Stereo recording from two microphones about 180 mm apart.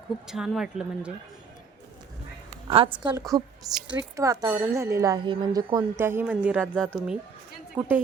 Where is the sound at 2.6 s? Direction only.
30° right (ahead or behind); by 6.7 s 10° right (ahead or behind).